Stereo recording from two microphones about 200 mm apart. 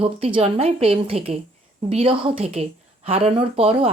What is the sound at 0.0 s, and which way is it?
A woman's voice, 25° right (ahead or behind).